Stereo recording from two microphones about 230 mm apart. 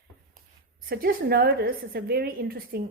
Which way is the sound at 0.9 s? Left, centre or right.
Right.